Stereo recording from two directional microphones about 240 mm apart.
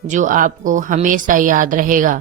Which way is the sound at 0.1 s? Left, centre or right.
Right.